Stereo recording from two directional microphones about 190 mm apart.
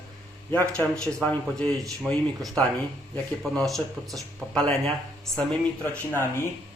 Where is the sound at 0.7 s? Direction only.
5° left (ahead or behind).